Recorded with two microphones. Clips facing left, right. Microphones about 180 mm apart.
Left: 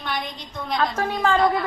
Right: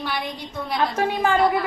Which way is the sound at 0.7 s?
15° right (ahead or behind).